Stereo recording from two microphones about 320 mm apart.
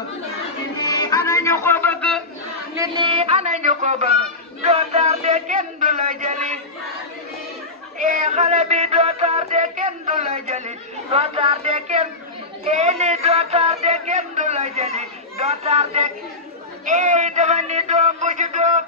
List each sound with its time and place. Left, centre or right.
0.7 s music: centre
2.7 s a sound: centre
8.0 s music: right
11.1 s a man's voice: centre